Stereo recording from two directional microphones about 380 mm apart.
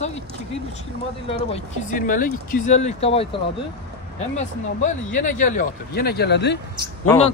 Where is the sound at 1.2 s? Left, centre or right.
Centre.